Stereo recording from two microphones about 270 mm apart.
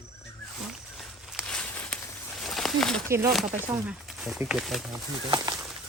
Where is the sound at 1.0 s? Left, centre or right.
Centre.